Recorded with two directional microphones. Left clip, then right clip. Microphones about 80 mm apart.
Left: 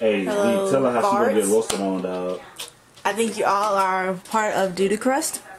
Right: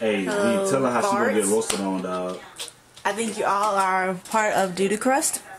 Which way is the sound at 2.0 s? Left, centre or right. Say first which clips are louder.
Left 2 dB; right.